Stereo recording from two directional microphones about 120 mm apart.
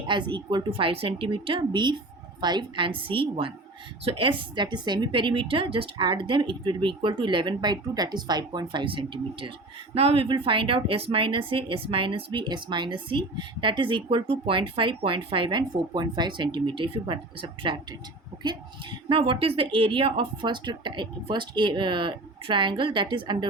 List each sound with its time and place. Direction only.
0.1 s a woman's voice: 40° right (ahead or behind)
9.9 s a woman's voice: 55° right (ahead or behind)